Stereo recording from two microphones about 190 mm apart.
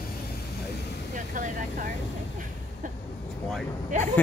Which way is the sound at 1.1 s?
45° right (ahead or behind).